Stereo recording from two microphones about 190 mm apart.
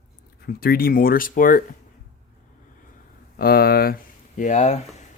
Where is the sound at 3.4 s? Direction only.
50° left (ahead or behind).